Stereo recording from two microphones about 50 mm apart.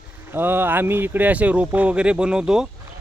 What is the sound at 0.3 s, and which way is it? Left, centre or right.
Speech, right.